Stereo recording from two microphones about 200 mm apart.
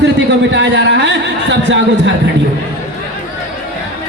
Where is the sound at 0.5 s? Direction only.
60° right (ahead or behind).